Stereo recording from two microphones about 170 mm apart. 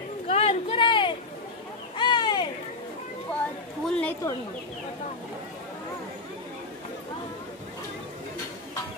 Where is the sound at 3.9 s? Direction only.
10° left (ahead or behind).